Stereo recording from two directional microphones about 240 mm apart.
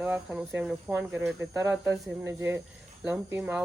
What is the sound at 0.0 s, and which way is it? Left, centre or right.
Speech, centre.